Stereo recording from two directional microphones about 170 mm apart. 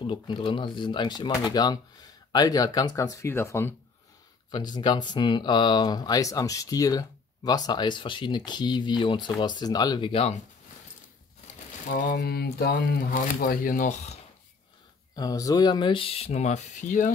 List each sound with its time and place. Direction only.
0.0 s speech: 30° left (ahead or behind)
11.9 s speech: 60° left (ahead or behind); by 14.1 s 45° left (ahead or behind)
15.1 s speech: 20° left (ahead or behind); by 17.1 s 50° left (ahead or behind)